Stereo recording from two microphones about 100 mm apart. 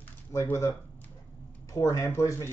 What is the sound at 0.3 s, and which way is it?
Speech, 30° left (ahead or behind).